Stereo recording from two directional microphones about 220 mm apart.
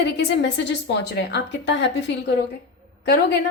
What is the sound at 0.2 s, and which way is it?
A woman's voice, 50° left (ahead or behind).